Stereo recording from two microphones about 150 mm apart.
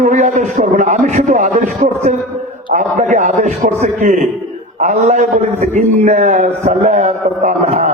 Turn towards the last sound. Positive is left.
turn(degrees=-55)  # may be behind; listen again after turning